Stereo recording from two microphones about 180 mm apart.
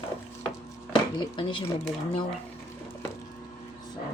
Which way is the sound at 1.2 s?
25° left (ahead or behind).